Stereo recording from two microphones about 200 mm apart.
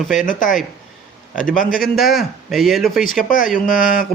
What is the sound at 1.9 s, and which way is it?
A man's voice, centre (ahead or behind).